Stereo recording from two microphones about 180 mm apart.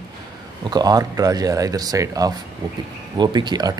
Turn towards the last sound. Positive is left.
turn(degrees=-25)  # may be behind; listen again after turning